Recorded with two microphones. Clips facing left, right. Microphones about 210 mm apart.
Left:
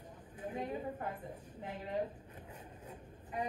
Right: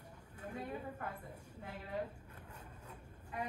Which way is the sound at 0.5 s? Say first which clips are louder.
Left 4 dB; 25° left (ahead or behind).